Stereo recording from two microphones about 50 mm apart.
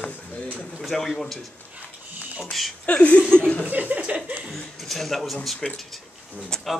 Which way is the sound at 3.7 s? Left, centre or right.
Right.